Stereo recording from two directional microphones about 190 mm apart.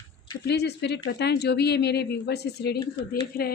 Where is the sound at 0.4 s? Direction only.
60° left (ahead or behind).